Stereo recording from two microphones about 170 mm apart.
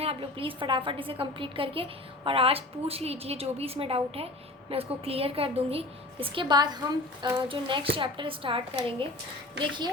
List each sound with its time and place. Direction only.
0.0 s a woman's voice: 35° right (ahead or behind)